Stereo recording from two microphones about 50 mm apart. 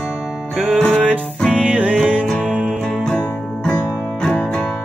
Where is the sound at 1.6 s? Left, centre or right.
Right.